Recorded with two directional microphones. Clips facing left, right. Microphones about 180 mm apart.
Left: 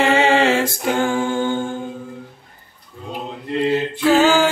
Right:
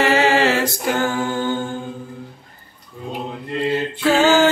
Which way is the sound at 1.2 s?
5° right (ahead or behind).